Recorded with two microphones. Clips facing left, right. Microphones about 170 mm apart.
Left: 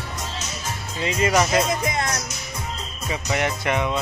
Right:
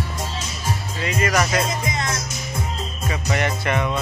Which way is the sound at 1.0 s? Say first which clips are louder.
Left 2 dB; 25° left (ahead or behind).